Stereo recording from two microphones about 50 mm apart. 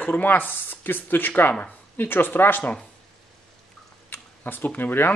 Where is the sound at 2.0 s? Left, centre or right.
Left.